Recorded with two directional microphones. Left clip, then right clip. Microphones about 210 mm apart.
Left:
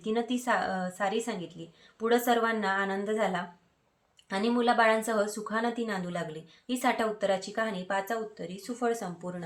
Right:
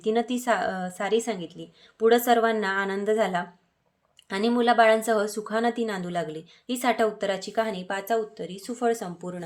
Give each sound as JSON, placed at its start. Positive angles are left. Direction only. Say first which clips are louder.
{"t": 0.0, "sound": "speech", "louder": "right 5 dB", "side_deg": -45}